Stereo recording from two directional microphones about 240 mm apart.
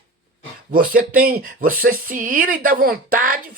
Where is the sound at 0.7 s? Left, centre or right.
Right.